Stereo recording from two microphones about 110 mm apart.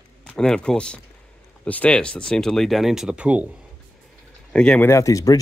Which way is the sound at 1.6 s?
10° left (ahead or behind).